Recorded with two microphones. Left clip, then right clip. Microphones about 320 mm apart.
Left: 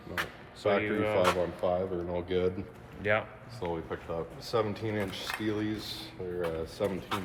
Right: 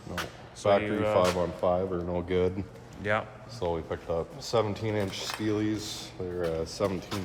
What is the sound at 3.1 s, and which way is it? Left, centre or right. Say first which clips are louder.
Speech: even; centre.